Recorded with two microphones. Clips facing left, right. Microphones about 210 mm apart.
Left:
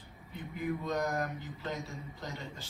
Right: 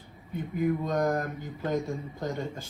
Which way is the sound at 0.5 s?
50° right (ahead or behind).